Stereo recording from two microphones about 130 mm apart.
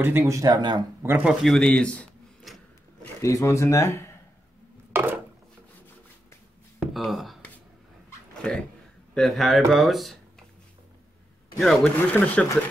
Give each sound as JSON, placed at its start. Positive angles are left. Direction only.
{"t": 0.0, "sound": "speech", "side_deg": -20}
{"t": 1.0, "sound": "speech", "side_deg": -10}
{"t": 1.4, "sound": "a sound", "side_deg": 5}
{"t": 3.0, "sound": "speech", "side_deg": 25}
{"t": 4.9, "sound": "a sound", "side_deg": -15}
{"t": 6.8, "sound": "speech", "side_deg": 0}
{"t": 8.4, "sound": "speech", "side_deg": 5}
{"t": 11.5, "sound": "speech", "side_deg": 0}